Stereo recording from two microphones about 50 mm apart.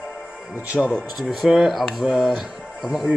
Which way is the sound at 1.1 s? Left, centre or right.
Centre.